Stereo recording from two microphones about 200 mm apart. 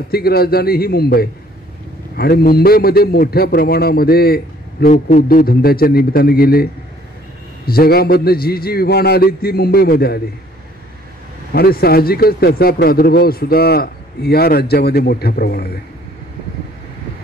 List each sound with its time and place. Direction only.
0.1 s a man's voice: 50° left (ahead or behind)
11.5 s a man's voice: 50° left (ahead or behind)